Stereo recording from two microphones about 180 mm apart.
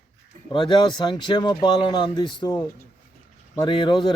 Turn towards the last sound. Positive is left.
turn(degrees=25)  # may be behind; listen again after turning